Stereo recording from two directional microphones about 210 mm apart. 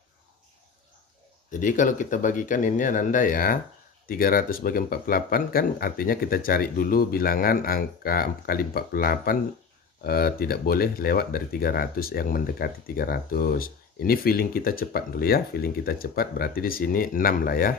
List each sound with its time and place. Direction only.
1.5 s speech: 40° left (ahead or behind)